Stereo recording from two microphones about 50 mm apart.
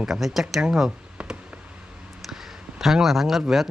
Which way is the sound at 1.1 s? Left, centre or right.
Right.